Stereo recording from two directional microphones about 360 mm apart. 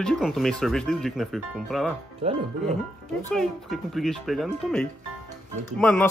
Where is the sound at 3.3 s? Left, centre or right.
Centre.